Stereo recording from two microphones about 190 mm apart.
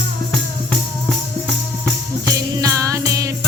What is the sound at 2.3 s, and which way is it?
Music, 20° right (ahead or behind).